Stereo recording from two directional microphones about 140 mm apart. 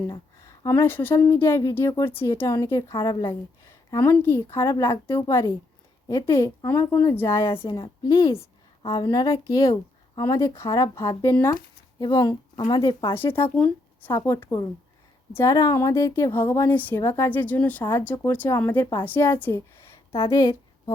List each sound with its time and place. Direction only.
0.1 s a woman's voice: 25° left (ahead or behind)
2.9 s a woman's voice: 30° left (ahead or behind)
3.7 s a woman's voice: 20° left (ahead or behind)
8.8 s a woman's voice: 35° left (ahead or behind)
13.1 s a woman's voice: 15° left (ahead or behind)